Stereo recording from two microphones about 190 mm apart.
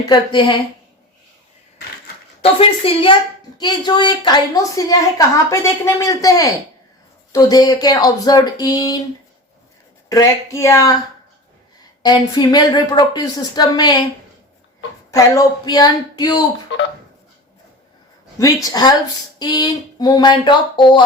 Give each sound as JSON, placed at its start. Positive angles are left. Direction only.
{"t": 0.1, "sound": "a woman's voice", "side_deg": 25}
{"t": 2.4, "sound": "a woman's voice", "side_deg": 30}
{"t": 10.1, "sound": "speech", "side_deg": 15}
{"t": 12.0, "sound": "a woman's voice", "side_deg": 20}
{"t": 15.1, "sound": "a woman's voice", "side_deg": 20}
{"t": 16.7, "sound": "speech", "side_deg": 75}
{"t": 18.3, "sound": "a woman's voice", "side_deg": 20}